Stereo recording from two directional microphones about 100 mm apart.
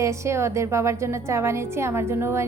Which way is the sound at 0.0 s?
30° right (ahead or behind).